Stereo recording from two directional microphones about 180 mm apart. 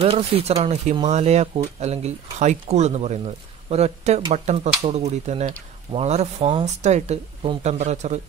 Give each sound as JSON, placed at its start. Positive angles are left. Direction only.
{"t": 0.0, "sound": "speech", "side_deg": -35}